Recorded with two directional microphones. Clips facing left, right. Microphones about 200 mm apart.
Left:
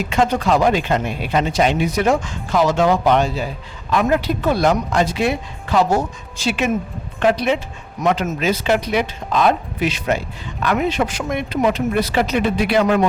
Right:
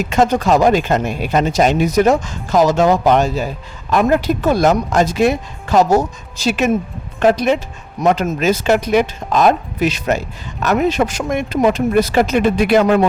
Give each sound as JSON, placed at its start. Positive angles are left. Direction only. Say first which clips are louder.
{"t": 0.0, "sound": "speech", "louder": "right 3 dB", "side_deg": -45}